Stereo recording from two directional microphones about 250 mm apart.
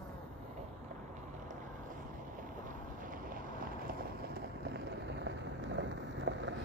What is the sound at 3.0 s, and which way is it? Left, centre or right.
Boat, right.